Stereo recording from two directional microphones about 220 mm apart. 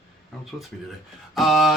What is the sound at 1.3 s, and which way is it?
Speech, centre (ahead or behind).